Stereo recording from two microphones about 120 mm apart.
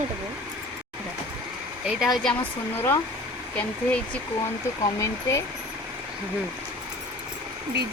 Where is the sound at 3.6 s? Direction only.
10° left (ahead or behind).